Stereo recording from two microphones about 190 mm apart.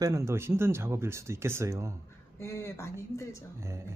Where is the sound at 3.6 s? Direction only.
15° right (ahead or behind).